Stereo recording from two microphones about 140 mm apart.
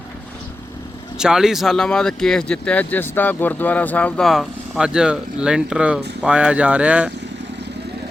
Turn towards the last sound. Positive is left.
turn(degrees=-10)  # may be behind; listen again after turning